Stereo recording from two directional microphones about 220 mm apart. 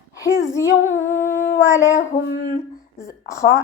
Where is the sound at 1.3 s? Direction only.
35° left (ahead or behind).